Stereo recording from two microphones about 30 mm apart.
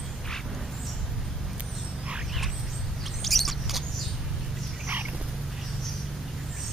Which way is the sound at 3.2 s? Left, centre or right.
Centre.